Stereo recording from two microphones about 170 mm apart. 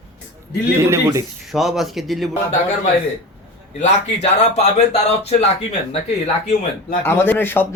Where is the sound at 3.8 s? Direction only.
40° left (ahead or behind).